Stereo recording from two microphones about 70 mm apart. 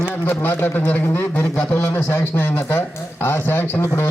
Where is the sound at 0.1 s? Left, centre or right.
Left.